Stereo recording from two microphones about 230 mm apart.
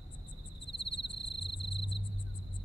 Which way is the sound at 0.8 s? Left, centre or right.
Left.